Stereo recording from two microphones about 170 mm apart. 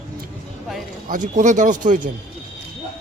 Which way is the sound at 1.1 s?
50° right (ahead or behind).